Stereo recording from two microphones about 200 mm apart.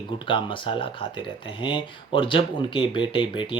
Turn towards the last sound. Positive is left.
turn(degrees=25)  # may be behind; listen again after turning